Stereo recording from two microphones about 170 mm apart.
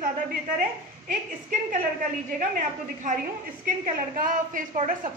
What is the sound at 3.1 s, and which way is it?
A woman's voice, 50° right (ahead or behind).